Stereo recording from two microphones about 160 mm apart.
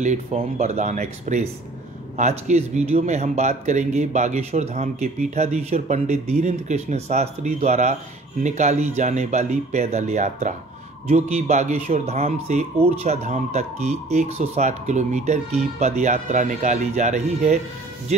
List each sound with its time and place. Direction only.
0.0 s speech: 45° right (ahead or behind)